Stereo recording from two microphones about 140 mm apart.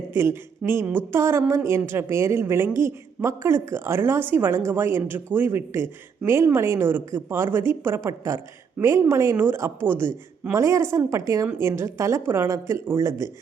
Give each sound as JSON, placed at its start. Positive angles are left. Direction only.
{"t": 0.1, "sound": "a woman's voice", "side_deg": -15}